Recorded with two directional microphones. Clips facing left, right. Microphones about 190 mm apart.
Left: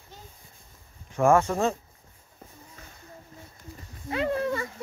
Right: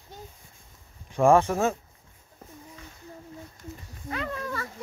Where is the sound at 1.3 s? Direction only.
15° right (ahead or behind).